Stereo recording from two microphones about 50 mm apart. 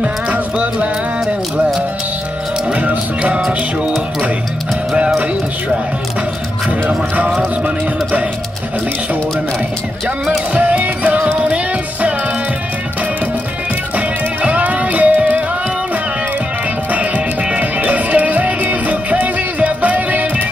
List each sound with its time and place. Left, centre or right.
0.0 s music: right
2.7 s music: right
4.9 s music: right
6.9 s music: right
10.5 s music: right
11.3 s music: right
13.9 s music: right
16.9 s music: right